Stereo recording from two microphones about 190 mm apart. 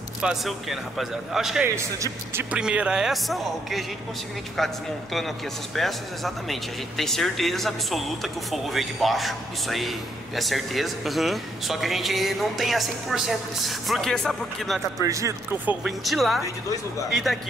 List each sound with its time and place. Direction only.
0.2 s speech: centre (ahead or behind)
5.8 s speech: centre (ahead or behind)
15.0 s speech: 15° right (ahead or behind)
15.8 s speech: centre (ahead or behind)